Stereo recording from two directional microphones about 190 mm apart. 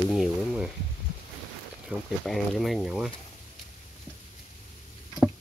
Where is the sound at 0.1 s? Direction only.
Centre (ahead or behind).